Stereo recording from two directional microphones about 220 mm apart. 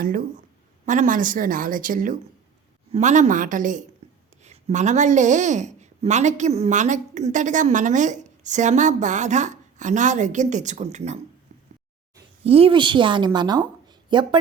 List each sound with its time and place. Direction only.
0.9 s speech: 35° right (ahead or behind)
12.4 s a woman's voice: 25° right (ahead or behind)